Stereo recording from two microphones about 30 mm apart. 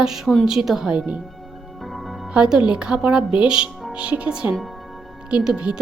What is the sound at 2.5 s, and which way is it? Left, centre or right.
Speech, right.